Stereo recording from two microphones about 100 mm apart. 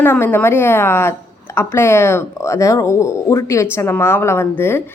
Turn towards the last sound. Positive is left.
turn(degrees=25)  # may be behind; listen again after turning